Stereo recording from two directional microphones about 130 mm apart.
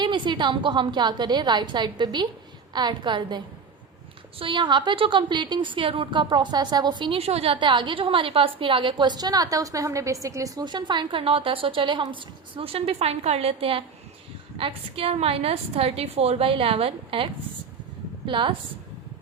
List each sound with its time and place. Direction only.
0.0 s a woman's voice: 40° right (ahead or behind)